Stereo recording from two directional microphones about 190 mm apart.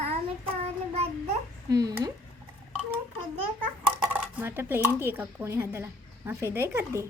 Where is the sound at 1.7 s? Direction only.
20° right (ahead or behind).